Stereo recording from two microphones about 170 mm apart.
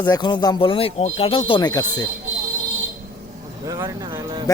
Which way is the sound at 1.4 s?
25° left (ahead or behind).